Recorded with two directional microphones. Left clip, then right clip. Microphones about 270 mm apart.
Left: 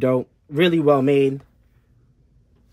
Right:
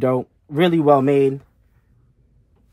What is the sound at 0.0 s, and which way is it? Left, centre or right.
Speech, centre.